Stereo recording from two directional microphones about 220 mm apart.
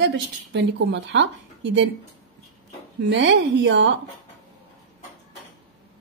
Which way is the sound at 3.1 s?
55° right (ahead or behind).